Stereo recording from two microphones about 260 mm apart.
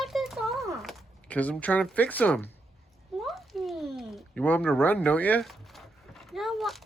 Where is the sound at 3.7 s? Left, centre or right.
Centre.